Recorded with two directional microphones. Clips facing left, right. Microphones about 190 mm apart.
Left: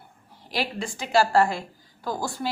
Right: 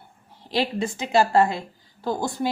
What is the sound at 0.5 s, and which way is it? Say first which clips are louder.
A woman's voice: right 5 dB; 20° right (ahead or behind).